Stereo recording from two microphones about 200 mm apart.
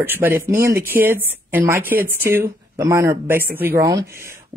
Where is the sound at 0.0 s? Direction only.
10° right (ahead or behind).